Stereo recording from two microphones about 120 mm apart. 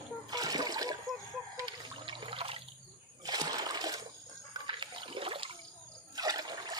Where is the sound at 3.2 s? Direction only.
35° right (ahead or behind).